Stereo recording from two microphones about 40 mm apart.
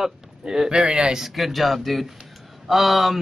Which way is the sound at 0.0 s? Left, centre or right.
Centre.